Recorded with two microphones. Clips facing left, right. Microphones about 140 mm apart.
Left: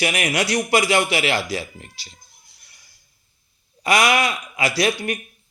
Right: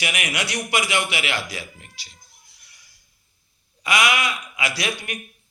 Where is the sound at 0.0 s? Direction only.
35° left (ahead or behind).